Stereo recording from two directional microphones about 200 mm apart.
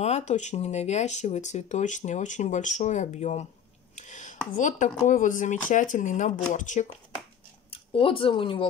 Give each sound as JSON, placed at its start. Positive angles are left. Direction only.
{"t": 0.0, "sound": "speech", "side_deg": 35}
{"t": 3.9, "sound": "a sound", "side_deg": 35}
{"t": 4.6, "sound": "speech", "side_deg": 40}
{"t": 7.7, "sound": "speech", "side_deg": 25}